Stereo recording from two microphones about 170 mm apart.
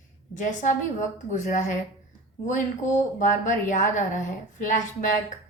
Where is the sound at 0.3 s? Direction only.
45° left (ahead or behind).